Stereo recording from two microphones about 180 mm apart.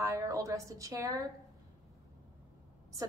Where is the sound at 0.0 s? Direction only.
15° right (ahead or behind).